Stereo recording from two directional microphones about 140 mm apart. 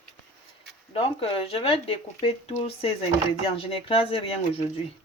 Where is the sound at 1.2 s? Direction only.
40° left (ahead or behind).